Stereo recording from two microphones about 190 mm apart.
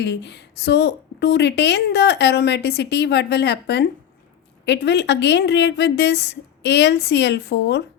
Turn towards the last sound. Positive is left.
turn(degrees=60)  # may be behind; listen again after turning